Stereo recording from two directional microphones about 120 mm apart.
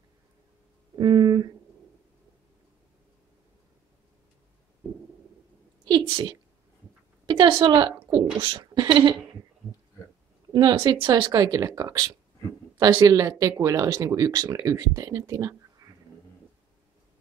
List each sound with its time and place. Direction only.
0.9 s a sound: 35° right (ahead or behind)
5.9 s a woman's voice: 40° right (ahead or behind)
10.5 s speech: 40° right (ahead or behind)